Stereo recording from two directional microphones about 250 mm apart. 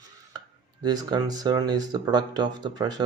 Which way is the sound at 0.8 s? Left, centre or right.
Centre.